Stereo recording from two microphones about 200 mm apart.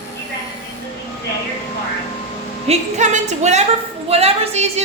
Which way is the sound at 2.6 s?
35° right (ahead or behind).